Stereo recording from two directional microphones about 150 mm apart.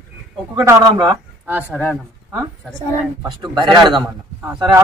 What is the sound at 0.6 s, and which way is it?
Speech, 30° right (ahead or behind).